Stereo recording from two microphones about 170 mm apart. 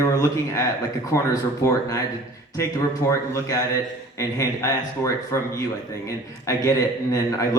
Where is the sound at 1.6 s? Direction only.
20° left (ahead or behind).